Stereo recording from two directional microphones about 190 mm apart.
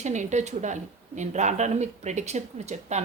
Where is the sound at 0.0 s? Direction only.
40° right (ahead or behind).